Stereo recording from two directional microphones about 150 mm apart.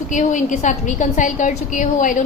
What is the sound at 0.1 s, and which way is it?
A woman's voice, 55° left (ahead or behind).